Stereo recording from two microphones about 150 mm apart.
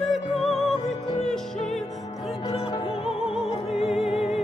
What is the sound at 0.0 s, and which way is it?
Music, centre (ahead or behind).